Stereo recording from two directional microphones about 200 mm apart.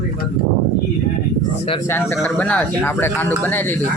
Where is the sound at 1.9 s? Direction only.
10° left (ahead or behind).